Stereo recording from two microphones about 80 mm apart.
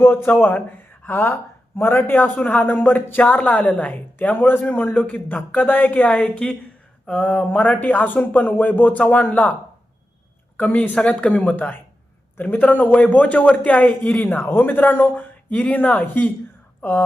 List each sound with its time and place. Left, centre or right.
0.3 s speech: left
10.6 s speech: left